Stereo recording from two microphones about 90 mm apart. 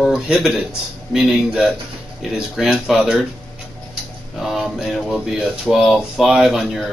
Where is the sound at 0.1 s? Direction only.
5° right (ahead or behind).